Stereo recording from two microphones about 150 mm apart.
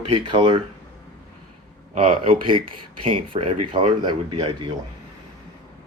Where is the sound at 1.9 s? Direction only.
35° right (ahead or behind).